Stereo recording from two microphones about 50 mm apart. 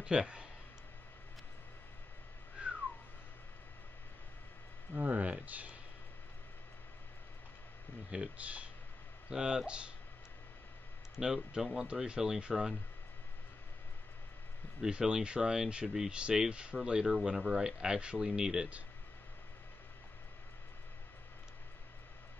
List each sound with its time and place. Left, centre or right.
0.0 s speech: centre
2.6 s whistling: right
4.9 s speech: right
8.1 s speech: right
9.3 s speech: centre
11.1 s speech: centre
14.8 s speech: centre